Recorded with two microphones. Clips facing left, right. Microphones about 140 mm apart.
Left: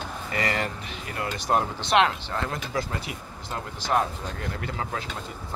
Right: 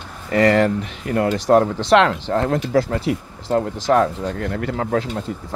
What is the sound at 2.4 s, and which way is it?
Speech, 80° right.